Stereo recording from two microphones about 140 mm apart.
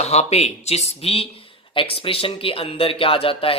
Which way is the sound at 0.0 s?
50° left (ahead or behind).